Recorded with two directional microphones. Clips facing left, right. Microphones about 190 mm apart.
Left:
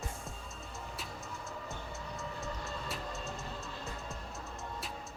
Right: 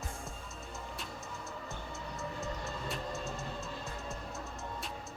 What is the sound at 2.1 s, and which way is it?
Music, centre (ahead or behind).